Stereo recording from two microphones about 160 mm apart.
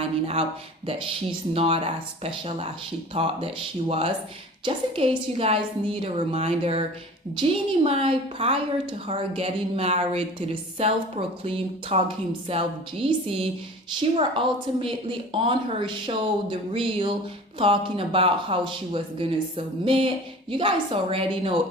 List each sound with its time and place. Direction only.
0.0 s speech: 35° right (ahead or behind)
7.9 s speech: 35° right (ahead or behind)